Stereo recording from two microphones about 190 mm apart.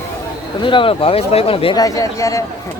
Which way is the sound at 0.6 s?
25° left (ahead or behind).